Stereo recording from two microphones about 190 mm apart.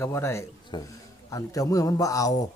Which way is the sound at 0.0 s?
15° left (ahead or behind).